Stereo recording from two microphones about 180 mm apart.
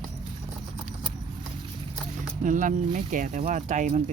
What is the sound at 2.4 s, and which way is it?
Speech, 45° right (ahead or behind).